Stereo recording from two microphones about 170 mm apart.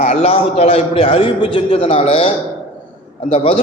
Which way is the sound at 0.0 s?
35° left (ahead or behind).